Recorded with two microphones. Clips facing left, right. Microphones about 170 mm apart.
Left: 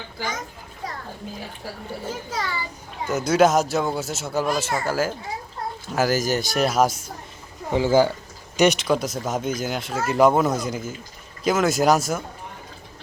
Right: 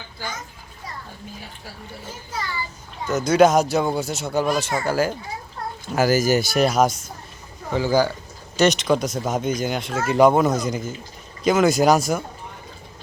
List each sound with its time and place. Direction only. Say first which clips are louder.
3.1 s speech: right 2 dB; 10° left (ahead or behind)
7.7 s speech: left 2 dB; 25° left (ahead or behind)
8.5 s speech: right 1 dB; 10° left (ahead or behind)